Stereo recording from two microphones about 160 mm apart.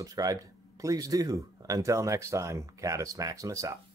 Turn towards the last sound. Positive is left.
turn(degrees=-20)  # may be behind; listen again after turning